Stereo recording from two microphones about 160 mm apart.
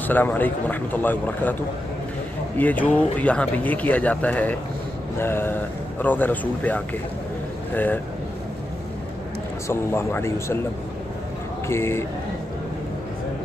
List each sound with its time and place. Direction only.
0.0 s speech: 10° left (ahead or behind)
9.7 s speech: 15° left (ahead or behind)
11.6 s speech: 15° left (ahead or behind)